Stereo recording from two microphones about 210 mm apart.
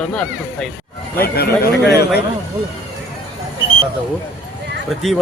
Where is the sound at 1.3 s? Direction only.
50° left (ahead or behind).